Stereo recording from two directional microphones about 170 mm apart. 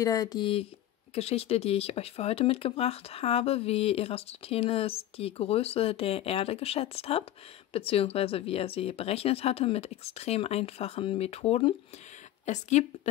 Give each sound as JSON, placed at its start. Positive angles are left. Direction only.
{"t": 0.0, "sound": "a woman's voice", "side_deg": 20}